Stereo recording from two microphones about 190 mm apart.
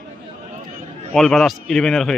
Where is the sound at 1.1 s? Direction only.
Centre (ahead or behind).